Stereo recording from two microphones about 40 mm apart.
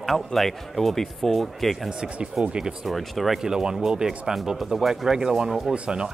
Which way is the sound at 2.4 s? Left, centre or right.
Right.